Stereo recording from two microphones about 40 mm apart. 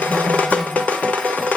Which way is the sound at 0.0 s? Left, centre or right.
Left.